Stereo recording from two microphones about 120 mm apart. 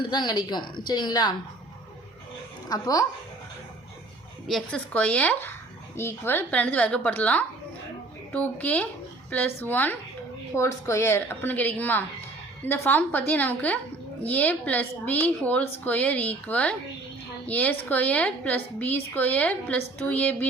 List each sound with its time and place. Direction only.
0.0 s a woman's voice: 40° left (ahead or behind)
2.6 s a woman's voice: 30° left (ahead or behind)
4.4 s a woman's voice: 5° left (ahead or behind)